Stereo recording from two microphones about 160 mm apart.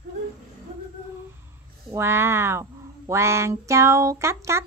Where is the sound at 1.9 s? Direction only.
15° right (ahead or behind).